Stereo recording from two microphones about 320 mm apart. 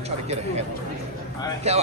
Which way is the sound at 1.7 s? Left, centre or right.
Centre.